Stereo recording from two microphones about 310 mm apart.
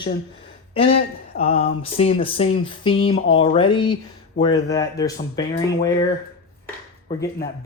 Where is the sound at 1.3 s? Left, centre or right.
Centre.